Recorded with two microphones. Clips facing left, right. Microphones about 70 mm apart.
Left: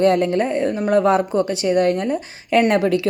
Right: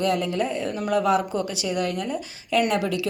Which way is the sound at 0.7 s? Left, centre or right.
Left.